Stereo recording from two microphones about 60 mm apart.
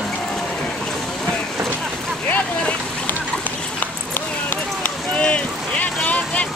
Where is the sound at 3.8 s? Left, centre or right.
Left.